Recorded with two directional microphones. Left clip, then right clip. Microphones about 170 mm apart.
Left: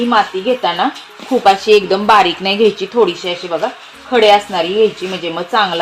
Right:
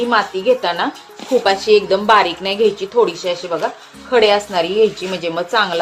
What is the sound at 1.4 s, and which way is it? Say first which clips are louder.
A woman's voice: left 4 dB; 40° left (ahead or behind).